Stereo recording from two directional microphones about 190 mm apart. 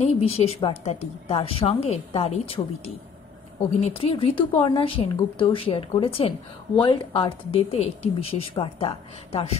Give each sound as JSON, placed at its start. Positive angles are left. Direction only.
{"t": 0.0, "sound": "a woman's voice", "side_deg": 35}